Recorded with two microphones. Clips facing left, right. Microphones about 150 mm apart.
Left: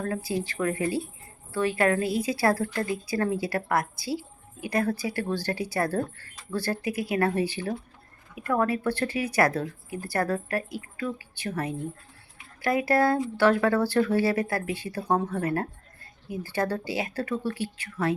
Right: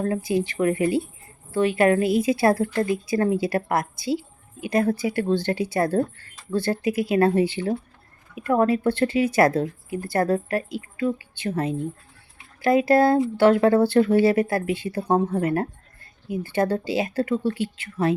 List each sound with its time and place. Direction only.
0.0 s speech: 20° right (ahead or behind)